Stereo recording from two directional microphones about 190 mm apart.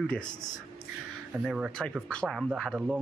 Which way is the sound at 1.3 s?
5° right (ahead or behind).